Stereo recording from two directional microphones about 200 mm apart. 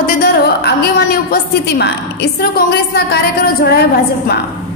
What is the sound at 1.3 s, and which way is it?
A woman's voice, 55° left (ahead or behind).